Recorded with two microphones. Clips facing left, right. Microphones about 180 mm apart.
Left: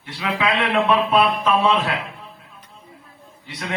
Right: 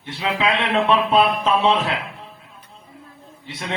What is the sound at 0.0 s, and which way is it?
A man's voice, 25° right (ahead or behind).